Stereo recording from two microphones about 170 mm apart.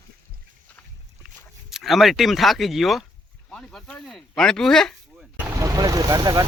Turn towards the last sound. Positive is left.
turn(degrees=-20)  # may be behind; listen again after turning